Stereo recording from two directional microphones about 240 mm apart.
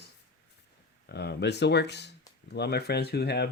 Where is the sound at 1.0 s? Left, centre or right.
Left.